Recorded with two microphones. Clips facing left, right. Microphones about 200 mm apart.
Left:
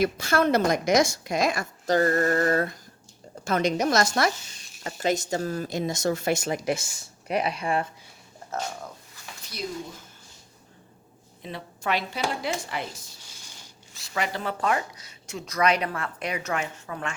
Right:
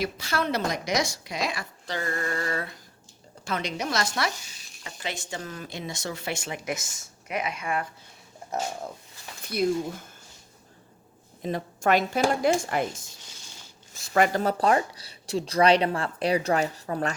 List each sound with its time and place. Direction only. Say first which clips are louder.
0.0 s a woman's voice: left 6 dB; 50° left (ahead or behind); by 7.9 s 30° left (ahead or behind)
9.4 s a sound: right 10 dB; 55° right (ahead or behind)
11.4 s speech: right 6 dB; 45° right (ahead or behind)